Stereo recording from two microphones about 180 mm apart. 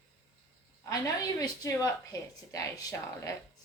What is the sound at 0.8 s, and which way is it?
A woman's voice, 20° left (ahead or behind).